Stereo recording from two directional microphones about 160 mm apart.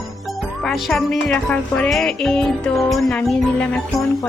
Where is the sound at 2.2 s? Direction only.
5° left (ahead or behind).